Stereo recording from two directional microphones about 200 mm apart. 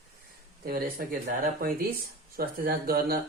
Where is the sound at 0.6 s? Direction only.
50° right (ahead or behind).